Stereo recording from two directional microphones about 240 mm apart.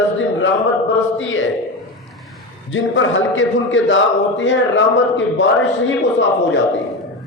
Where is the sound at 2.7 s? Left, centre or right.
Left.